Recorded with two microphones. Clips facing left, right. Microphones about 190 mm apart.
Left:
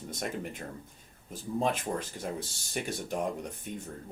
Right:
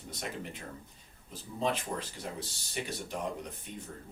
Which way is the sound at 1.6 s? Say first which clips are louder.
Left 2 dB; 50° left (ahead or behind).